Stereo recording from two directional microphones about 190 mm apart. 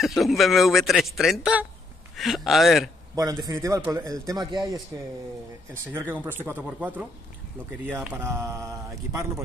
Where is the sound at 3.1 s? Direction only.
20° right (ahead or behind).